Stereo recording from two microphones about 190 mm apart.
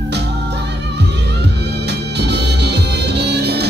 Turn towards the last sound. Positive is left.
turn(degrees=-60)  # may be behind; listen again after turning